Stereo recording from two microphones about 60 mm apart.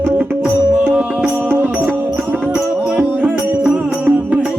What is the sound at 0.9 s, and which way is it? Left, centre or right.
Music, centre.